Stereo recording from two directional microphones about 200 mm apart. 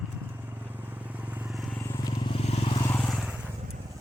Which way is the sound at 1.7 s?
15° left (ahead or behind).